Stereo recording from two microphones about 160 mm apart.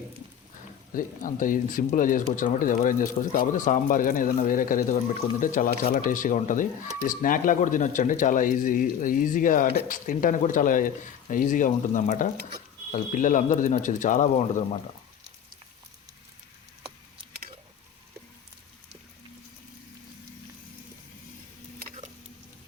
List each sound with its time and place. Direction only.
0.9 s speech: 60° left (ahead or behind)